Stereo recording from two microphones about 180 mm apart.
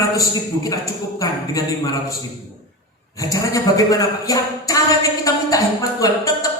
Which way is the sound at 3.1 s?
20° left (ahead or behind).